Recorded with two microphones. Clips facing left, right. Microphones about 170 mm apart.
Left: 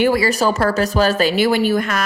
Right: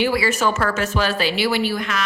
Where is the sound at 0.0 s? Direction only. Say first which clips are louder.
Left 4 dB; 45° left (ahead or behind).